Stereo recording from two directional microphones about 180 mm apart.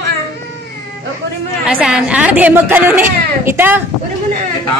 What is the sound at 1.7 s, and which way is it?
Speech, 5° right (ahead or behind).